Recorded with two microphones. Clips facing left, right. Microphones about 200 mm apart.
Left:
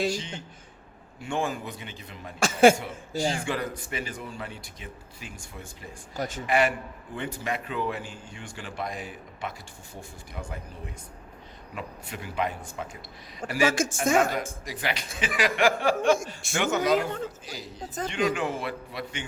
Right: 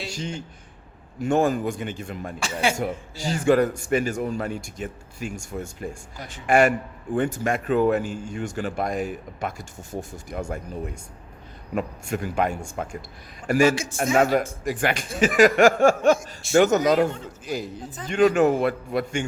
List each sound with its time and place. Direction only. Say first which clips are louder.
0.1 s a sound: right 1 dB; 45° right (ahead or behind)
1.2 s a man's voice: right 9 dB; 45° right (ahead or behind)
2.4 s speech: left 7 dB; 45° left (ahead or behind)
3.3 s a man's voice: right 11 dB; 45° right (ahead or behind)
6.1 s speech: left 7 dB; 45° left (ahead or behind)
6.5 s a man's voice: right 7 dB; 45° right (ahead or behind)
11.7 s a man's voice: right 11 dB; 45° right (ahead or behind)